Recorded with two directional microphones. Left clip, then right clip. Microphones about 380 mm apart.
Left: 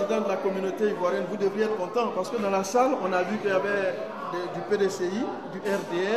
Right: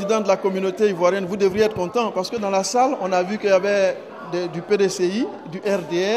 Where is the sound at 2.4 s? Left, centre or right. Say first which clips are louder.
Right 5 dB; right.